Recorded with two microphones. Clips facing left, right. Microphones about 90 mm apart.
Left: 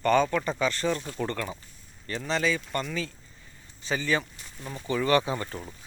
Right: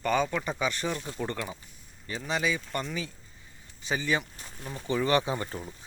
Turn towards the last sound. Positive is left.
turn(degrees=-25)  # may be behind; listen again after turning